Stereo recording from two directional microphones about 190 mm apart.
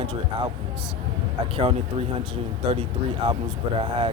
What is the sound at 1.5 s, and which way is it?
Speech, 30° right (ahead or behind).